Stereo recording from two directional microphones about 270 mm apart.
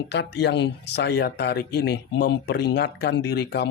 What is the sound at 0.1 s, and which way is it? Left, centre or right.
Speech, left.